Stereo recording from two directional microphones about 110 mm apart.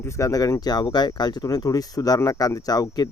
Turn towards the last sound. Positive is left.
turn(degrees=35)  # may be behind; listen again after turning